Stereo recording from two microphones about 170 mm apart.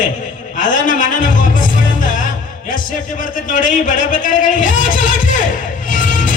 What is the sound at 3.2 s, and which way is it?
A man's voice, 50° left (ahead or behind).